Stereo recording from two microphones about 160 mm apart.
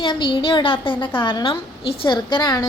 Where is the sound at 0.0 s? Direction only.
30° left (ahead or behind).